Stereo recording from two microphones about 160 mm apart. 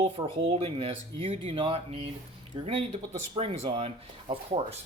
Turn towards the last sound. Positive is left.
turn(degrees=-35)  # may be behind; listen again after turning